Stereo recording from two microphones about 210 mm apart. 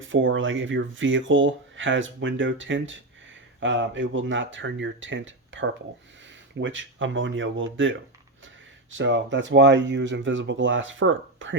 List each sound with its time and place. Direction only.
0.0 s speech: 65° right (ahead or behind)